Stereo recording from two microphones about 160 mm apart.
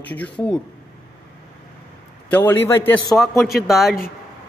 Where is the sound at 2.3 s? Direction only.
15° left (ahead or behind).